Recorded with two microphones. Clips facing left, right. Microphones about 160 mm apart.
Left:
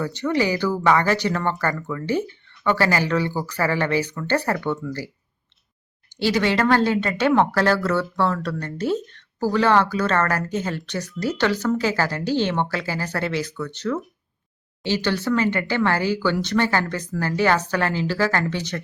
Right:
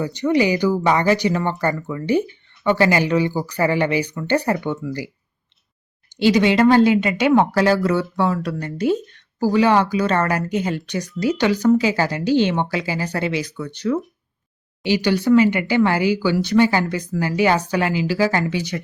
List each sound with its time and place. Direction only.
0.0 s speech: 15° right (ahead or behind)
6.1 s speech: 15° right (ahead or behind)